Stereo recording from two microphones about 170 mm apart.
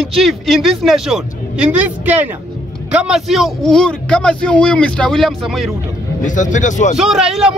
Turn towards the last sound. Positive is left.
turn(degrees=-5)  # may be behind; listen again after turning